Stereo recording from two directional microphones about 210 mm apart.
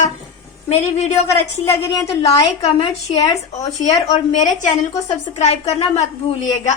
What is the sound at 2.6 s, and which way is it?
Speech, 30° left (ahead or behind).